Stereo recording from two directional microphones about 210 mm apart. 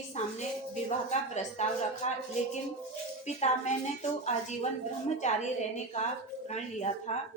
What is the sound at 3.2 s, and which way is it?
Speech, 35° left (ahead or behind).